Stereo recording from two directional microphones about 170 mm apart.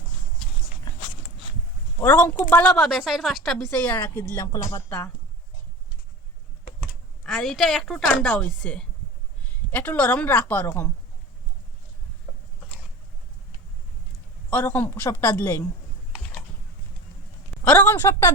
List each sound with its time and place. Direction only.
2.0 s a woman's voice: 10° left (ahead or behind)
6.8 s a sound: centre (ahead or behind)
8.0 s a woman's voice: 10° left (ahead or behind)
14.5 s a woman's voice: 10° left (ahead or behind)
17.7 s a woman's voice: 15° left (ahead or behind)